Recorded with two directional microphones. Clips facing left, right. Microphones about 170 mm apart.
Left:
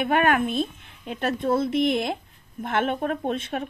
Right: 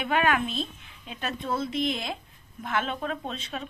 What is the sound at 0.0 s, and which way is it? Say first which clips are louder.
Speech: left 4 dB; 50° left (ahead or behind).